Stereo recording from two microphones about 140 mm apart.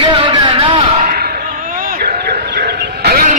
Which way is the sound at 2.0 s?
90° right.